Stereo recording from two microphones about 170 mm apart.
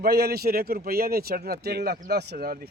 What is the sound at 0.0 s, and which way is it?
Speech, 65° right (ahead or behind).